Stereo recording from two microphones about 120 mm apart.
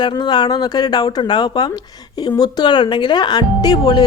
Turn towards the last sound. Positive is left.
turn(degrees=35)  # may be behind; listen again after turning